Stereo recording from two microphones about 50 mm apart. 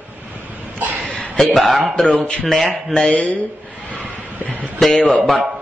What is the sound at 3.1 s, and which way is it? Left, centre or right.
Speech, left.